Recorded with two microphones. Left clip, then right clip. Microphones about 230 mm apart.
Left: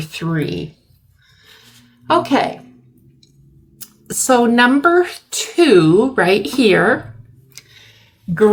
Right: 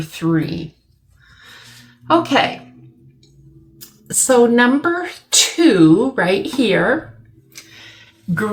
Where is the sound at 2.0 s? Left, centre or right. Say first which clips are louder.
Even; left.